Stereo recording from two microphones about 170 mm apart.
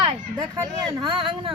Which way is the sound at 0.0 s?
30° right (ahead or behind).